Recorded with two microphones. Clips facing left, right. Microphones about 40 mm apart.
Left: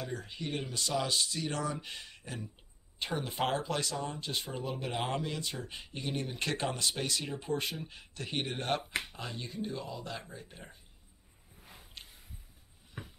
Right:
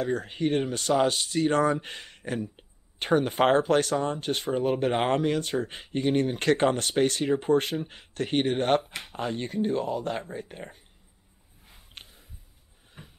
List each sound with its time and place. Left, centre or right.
0.0 s speech: right